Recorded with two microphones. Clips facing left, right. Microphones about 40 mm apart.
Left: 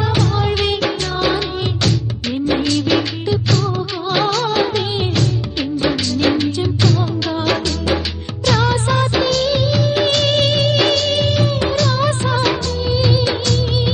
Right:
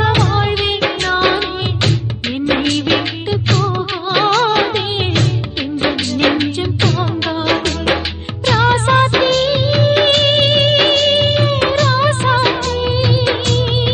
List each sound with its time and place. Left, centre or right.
0.0 s music of bollywood: right
0.5 s music: right
7.3 s music: right
7.6 s music: right
8.5 s music: right
8.7 s music: right
9.7 s music of bollywood: right
12.6 s music: right